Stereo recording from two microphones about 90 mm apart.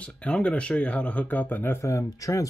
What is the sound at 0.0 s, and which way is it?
Speech, 15° left (ahead or behind).